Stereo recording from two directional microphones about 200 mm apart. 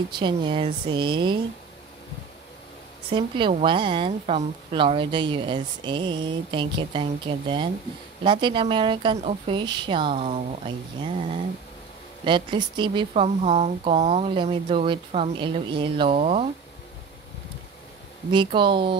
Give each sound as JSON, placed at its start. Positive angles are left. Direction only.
{"t": 0.1, "sound": "a woman's voice", "side_deg": -25}
{"t": 3.1, "sound": "a woman's voice", "side_deg": -25}
{"t": 18.3, "sound": "a woman's voice", "side_deg": -25}